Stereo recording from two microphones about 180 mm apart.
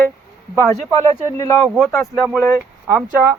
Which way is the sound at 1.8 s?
Centre (ahead or behind).